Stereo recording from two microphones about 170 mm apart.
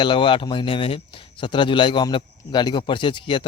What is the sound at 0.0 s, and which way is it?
Speech, 30° left (ahead or behind).